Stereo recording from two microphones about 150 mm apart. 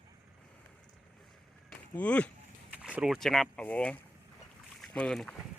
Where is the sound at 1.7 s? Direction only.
10° left (ahead or behind).